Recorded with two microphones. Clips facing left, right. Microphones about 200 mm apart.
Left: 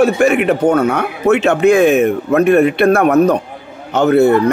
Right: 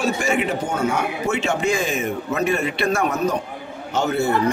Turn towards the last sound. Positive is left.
turn(degrees=60)  # may be behind; listen again after turning